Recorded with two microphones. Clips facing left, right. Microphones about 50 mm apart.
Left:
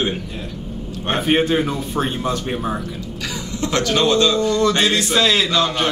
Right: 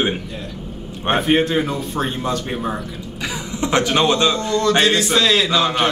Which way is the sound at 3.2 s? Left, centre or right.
Centre.